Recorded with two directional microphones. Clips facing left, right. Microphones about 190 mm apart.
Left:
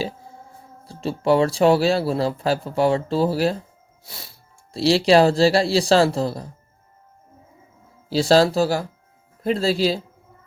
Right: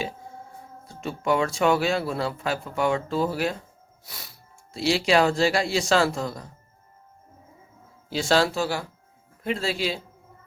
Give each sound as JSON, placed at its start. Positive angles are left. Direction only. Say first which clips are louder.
{"t": 0.9, "sound": "speech", "louder": "left 6 dB", "side_deg": 30}
{"t": 8.1, "sound": "speech", "louder": "left 6 dB", "side_deg": 35}